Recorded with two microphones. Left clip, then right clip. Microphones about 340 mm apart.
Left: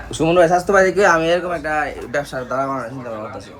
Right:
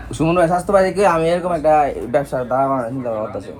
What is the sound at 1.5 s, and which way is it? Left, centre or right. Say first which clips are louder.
Speech: right 6 dB; centre.